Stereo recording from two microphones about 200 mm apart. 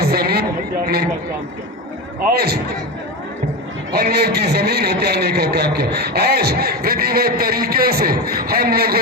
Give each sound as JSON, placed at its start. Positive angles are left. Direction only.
{"t": 0.0, "sound": "a sound", "side_deg": -50}
{"t": 2.3, "sound": "a man's voice", "side_deg": -50}
{"t": 3.9, "sound": "a man's voice", "side_deg": -50}